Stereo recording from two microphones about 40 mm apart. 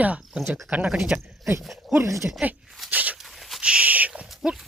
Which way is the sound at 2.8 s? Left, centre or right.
Right.